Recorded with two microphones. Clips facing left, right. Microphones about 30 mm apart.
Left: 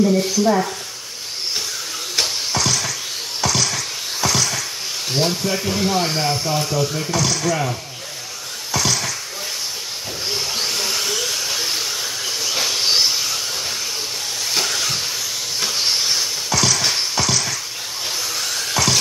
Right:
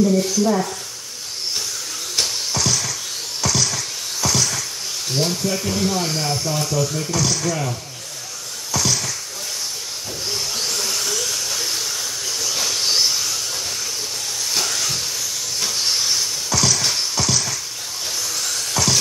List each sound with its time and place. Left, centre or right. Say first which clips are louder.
0.0 s speech: left 1 dB; centre
2.1 s a sound: left 2 dB; centre
3.3 s music: left 1 dB; centre
5.1 s speech: left 1 dB; centre
8.7 s a sound: left 1 dB; centre
10.2 s a sound: left 2 dB; left
14.5 s train: left 2 dB; centre
15.6 s music: left 1 dB; centre
18.3 s dental drill: left 2 dB; centre